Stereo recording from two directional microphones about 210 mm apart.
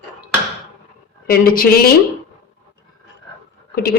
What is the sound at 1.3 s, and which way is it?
Speech, 45° left (ahead or behind).